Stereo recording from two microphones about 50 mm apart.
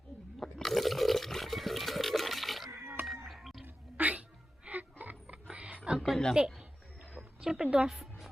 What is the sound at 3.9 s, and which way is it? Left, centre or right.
Music, right.